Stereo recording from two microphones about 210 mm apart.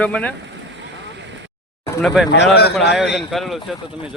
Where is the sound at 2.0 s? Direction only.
Centre (ahead or behind).